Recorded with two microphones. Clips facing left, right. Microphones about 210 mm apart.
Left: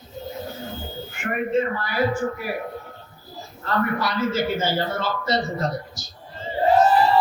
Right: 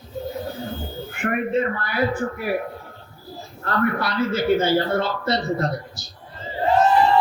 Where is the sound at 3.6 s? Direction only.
60° right (ahead or behind).